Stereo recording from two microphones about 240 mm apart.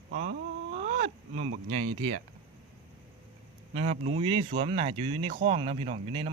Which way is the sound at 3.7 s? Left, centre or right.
Right.